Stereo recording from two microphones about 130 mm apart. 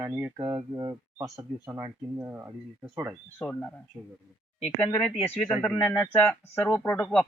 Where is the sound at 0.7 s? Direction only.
25° right (ahead or behind).